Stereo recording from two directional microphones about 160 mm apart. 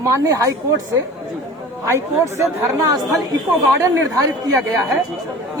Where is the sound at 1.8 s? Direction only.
15° right (ahead or behind).